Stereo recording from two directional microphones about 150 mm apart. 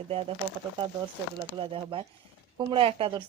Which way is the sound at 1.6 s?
35° right (ahead or behind).